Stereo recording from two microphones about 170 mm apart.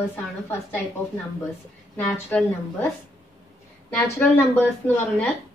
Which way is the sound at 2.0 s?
5° left (ahead or behind).